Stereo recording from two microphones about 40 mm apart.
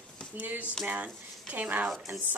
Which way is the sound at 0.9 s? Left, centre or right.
Right.